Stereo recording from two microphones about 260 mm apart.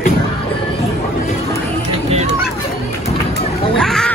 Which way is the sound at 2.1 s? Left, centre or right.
Right.